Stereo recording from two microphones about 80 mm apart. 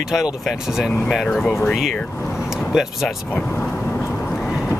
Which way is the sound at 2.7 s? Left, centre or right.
Centre.